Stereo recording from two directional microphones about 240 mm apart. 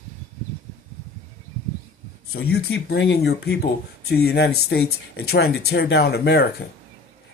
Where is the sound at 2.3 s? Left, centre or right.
Left.